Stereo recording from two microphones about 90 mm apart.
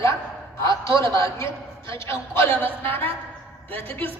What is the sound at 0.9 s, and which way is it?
A man's voice, 30° left (ahead or behind).